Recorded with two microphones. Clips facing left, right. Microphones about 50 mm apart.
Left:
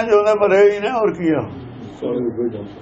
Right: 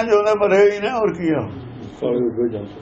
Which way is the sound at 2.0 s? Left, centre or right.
Right.